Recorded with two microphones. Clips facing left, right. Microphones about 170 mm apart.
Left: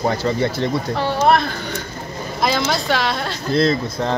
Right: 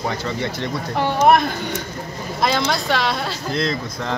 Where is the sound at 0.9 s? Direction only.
15° right (ahead or behind).